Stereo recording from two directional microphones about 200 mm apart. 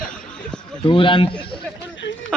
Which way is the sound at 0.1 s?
5° left (ahead or behind).